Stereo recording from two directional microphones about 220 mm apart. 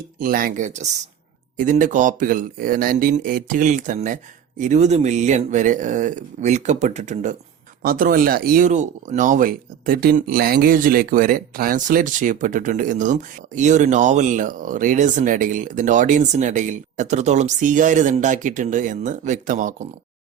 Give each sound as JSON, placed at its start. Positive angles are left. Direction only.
{"t": 0.2, "sound": "speech", "side_deg": -40}